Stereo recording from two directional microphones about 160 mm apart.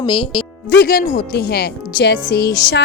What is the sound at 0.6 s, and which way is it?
A woman's voice, 75° left (ahead or behind).